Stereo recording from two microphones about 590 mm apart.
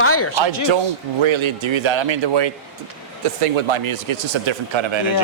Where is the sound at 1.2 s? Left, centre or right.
Right.